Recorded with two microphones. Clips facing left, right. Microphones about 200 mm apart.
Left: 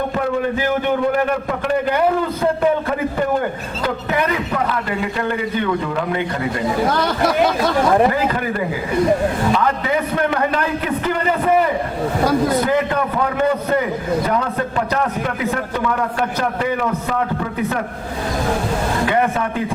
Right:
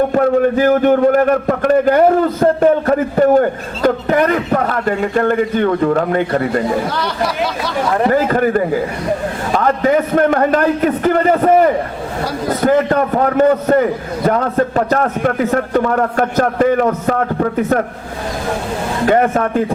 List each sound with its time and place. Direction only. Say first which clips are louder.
0.1 s a man's voice: right 7 dB; 45° right (ahead or behind)
8.1 s a man's voice: right 7 dB; 45° right (ahead or behind)
19.0 s a man's voice: right 8 dB; 45° right (ahead or behind)